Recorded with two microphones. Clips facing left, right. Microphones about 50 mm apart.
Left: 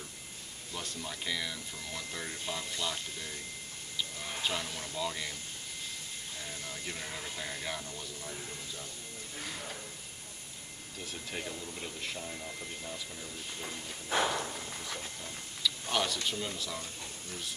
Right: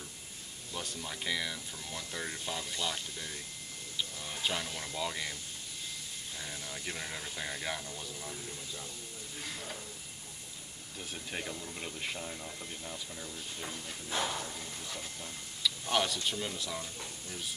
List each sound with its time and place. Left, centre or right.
0.7 s speech: centre
2.8 s speech: centre
4.4 s speech: centre
6.4 s speech: centre
11.3 s speech: centre
14.0 s a sound: left
15.6 s speech: centre